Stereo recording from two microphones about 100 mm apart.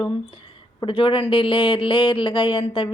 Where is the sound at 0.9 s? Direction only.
55° left (ahead or behind).